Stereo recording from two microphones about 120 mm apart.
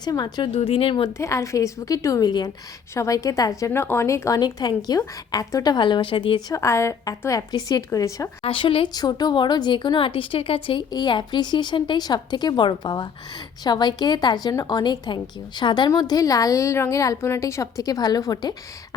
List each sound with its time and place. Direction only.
0.0 s speech: 35° left (ahead or behind)
0.5 s speech: 50° left (ahead or behind)
1.2 s a woman's voice: 25° left (ahead or behind)
3.7 s speech: 20° left (ahead or behind); by 6.4 s 45° left (ahead or behind)
6.5 s a woman's voice: 25° left (ahead or behind)
8.4 s a woman's voice: 45° left (ahead or behind)